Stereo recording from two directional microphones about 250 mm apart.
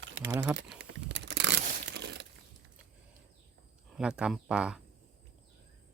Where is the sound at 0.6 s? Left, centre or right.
Centre.